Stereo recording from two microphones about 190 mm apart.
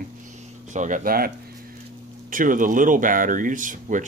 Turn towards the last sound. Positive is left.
turn(degrees=-45)  # may be behind; listen again after turning